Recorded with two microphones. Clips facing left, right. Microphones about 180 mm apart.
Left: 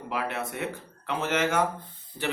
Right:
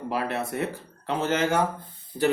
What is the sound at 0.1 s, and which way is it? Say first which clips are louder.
A man's voice: right 3 dB; 35° right (ahead or behind).